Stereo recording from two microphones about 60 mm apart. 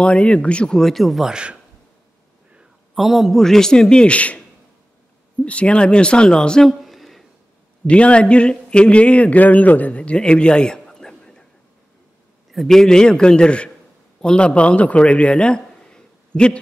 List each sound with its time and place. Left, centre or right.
0.0 s a man's voice: left; by 1.3 s centre
1.3 s speech: centre
2.9 s a man's voice: centre; by 4.4 s left
5.4 s a man's voice: left
6.7 s a sound: centre
7.8 s speech: centre
12.4 s a man's voice: centre